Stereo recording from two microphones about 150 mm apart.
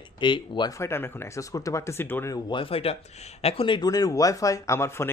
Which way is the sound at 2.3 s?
35° left (ahead or behind).